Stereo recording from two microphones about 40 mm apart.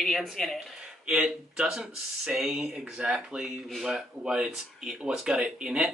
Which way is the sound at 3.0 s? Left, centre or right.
Right.